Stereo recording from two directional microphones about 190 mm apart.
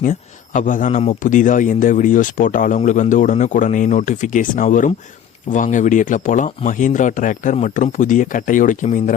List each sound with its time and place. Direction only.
0.0 s a man's voice: 40° left (ahead or behind)